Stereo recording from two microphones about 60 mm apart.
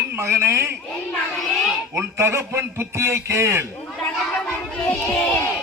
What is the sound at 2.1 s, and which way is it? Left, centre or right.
A man's voice, right.